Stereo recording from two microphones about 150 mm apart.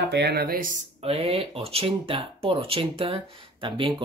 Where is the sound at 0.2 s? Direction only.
90° right; by 0.7 s 70° right (ahead or behind).